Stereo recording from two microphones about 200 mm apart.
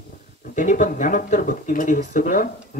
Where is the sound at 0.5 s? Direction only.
40° left (ahead or behind).